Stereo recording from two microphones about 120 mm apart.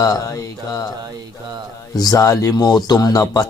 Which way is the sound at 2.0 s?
30° left (ahead or behind).